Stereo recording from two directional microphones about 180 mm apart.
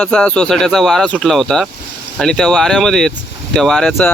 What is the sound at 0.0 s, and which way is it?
Speech, 5° left (ahead or behind).